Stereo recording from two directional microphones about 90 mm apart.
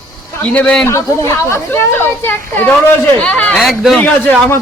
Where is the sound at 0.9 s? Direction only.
35° left (ahead or behind); by 3.6 s 15° left (ahead or behind).